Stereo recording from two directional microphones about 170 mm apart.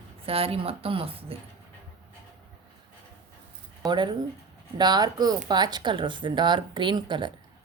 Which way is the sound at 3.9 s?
25° right (ahead or behind).